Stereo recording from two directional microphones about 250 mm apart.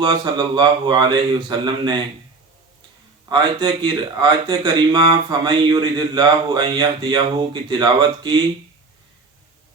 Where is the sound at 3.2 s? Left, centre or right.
Centre.